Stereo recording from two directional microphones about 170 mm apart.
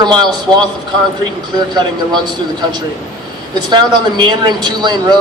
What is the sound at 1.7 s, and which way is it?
Speech, 25° right (ahead or behind).